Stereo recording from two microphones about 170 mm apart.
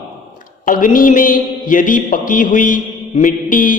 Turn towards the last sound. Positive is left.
turn(degrees=50)  # may be behind; listen again after turning